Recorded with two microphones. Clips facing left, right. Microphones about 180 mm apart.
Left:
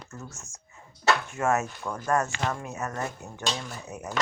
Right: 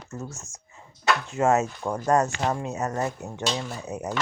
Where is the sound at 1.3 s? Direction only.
25° right (ahead or behind).